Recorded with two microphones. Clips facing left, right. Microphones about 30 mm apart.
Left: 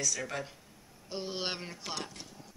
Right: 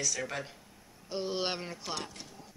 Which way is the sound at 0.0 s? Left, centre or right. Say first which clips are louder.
Even; centre.